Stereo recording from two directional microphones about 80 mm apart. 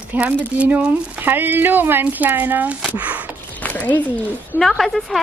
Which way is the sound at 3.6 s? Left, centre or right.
Centre.